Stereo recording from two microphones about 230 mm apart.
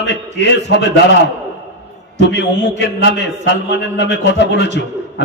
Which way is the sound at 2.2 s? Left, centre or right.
Left.